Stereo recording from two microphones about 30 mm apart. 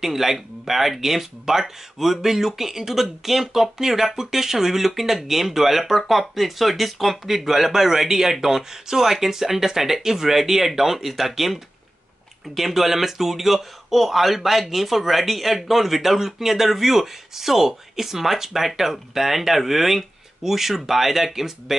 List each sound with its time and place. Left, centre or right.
0.0 s speech: centre